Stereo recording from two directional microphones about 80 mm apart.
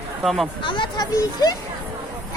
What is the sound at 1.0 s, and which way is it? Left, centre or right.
Speech, left.